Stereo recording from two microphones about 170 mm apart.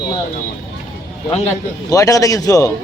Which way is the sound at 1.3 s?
40° left (ahead or behind).